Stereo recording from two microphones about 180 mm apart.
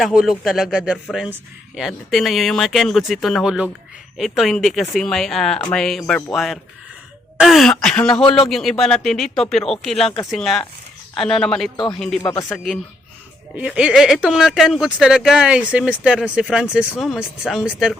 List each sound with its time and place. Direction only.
0.0 s speech: centre (ahead or behind)
12.2 s speech: 20° left (ahead or behind)
12.5 s speech: centre (ahead or behind)